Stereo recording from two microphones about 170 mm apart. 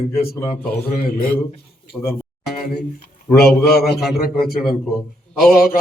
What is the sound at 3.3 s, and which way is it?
A man's voice, 70° left (ahead or behind).